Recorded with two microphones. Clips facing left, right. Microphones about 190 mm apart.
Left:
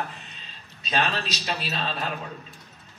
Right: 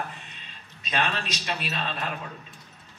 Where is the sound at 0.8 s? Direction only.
30° left (ahead or behind).